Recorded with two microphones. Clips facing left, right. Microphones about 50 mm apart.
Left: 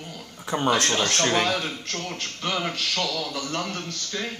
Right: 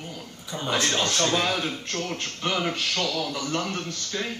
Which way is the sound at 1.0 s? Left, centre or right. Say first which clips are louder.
Left 1 dB; left.